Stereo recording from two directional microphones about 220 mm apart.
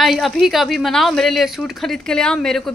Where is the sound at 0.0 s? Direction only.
Centre (ahead or behind).